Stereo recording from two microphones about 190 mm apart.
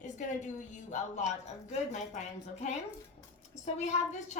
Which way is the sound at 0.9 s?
35° left (ahead or behind).